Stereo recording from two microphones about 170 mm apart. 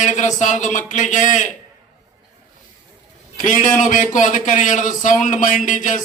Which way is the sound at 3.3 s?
45° left (ahead or behind).